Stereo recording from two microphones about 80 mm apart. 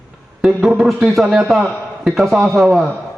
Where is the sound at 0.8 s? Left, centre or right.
Centre.